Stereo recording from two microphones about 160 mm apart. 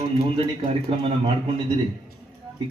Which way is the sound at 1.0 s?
35° right (ahead or behind).